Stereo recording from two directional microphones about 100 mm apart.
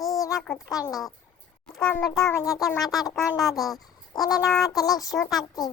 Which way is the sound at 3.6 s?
Centre (ahead or behind).